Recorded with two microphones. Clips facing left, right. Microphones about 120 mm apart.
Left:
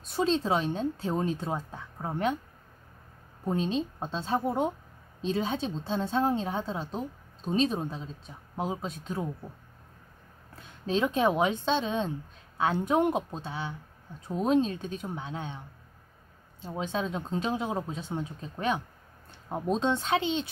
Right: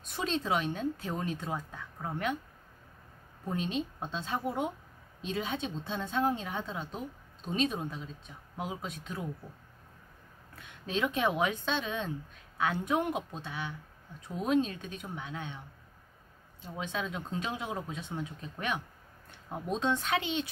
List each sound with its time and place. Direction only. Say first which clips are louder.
0.1 s a woman's voice: left 5 dB; 30° left (ahead or behind)
3.4 s speech: left 5 dB; 30° left (ahead or behind)
10.5 s a woman's voice: left 6 dB; 30° left (ahead or behind)
16.6 s a woman's voice: left 5 dB; 30° left (ahead or behind)